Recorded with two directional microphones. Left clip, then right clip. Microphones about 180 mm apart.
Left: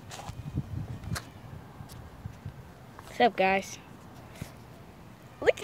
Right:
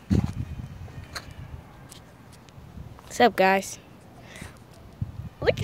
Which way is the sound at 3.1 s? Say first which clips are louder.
Right 5 dB; 25° right (ahead or behind).